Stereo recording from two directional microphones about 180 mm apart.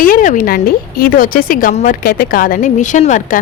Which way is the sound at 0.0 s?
50° left (ahead or behind).